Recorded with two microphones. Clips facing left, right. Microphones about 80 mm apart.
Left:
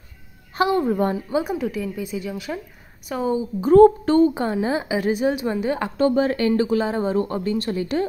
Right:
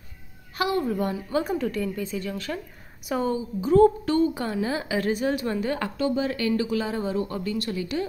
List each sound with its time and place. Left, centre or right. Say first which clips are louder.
0.6 s speech: left 5 dB; left
1.3 s a woman's voice: left 2 dB; centre
3.1 s speech: right 1 dB; centre
3.6 s a woman's voice: left 6 dB; left; by 5.9 s centre
5.9 s speech: left 9 dB; left